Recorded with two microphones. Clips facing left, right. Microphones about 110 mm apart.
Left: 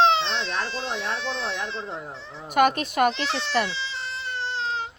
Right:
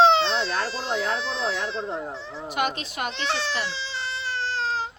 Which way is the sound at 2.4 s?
50° left (ahead or behind).